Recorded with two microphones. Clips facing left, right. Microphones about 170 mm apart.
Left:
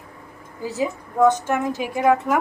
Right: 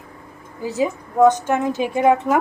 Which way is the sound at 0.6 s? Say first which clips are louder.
Right 3 dB; 20° right (ahead or behind).